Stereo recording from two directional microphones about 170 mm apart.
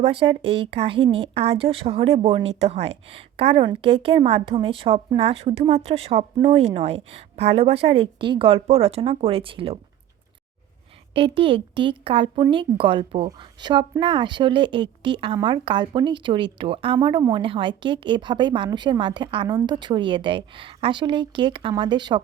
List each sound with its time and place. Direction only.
0.0 s a woman's voice: 35° right (ahead or behind)
11.1 s a woman's voice: 30° right (ahead or behind)